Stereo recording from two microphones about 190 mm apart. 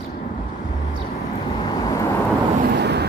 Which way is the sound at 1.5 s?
20° left (ahead or behind).